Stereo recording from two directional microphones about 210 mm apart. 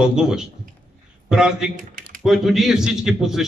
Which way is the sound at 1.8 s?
40° right (ahead or behind).